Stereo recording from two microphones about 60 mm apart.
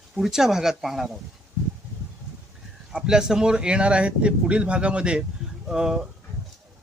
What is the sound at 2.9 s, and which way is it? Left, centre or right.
Speech, centre.